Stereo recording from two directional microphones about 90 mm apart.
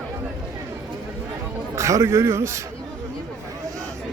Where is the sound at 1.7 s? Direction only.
35° right (ahead or behind).